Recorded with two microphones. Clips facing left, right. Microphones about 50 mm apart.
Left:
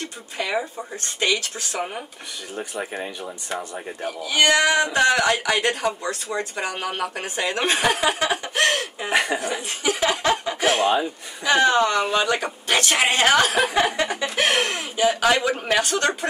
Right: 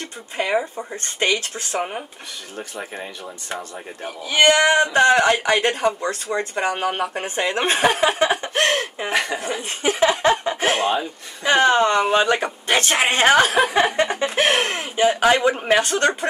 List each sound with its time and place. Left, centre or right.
0.0 s speech: right
2.8 s speech: centre
4.2 s speech: right
9.1 s speech: centre
9.4 s speech: right